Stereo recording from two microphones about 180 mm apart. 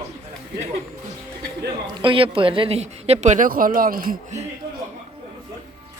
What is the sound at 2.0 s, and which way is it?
Speech, 30° right (ahead or behind).